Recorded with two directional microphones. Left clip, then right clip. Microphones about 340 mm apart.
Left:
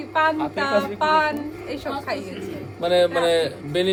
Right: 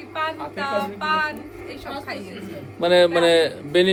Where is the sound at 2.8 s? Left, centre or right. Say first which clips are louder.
Right 3 dB; right.